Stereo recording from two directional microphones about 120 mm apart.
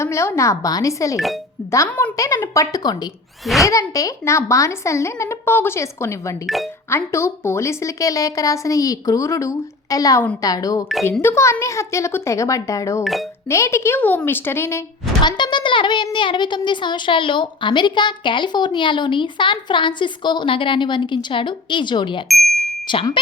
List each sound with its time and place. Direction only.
0.0 s a woman's voice: 25° left (ahead or behind)
1.9 s a woman's voice: 10° left (ahead or behind)
2.1 s a woman's voice: 30° left (ahead or behind)
15.2 s a woman's voice: 40° left (ahead or behind)
22.3 s bicycle bell: centre (ahead or behind)
22.9 s a woman's voice: 40° left (ahead or behind)